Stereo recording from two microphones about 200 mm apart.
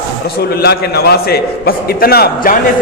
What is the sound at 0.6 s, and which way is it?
A man's voice, 55° left (ahead or behind).